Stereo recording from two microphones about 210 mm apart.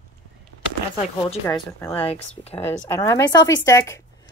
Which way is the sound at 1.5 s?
10° left (ahead or behind).